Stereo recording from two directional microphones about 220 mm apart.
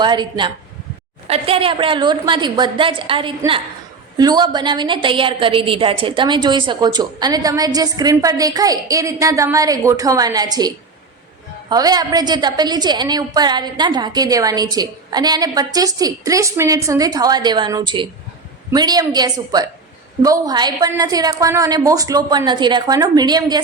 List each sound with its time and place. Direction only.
0.0 s a woman's voice: 20° right (ahead or behind)
11.7 s a woman's voice: 15° right (ahead or behind)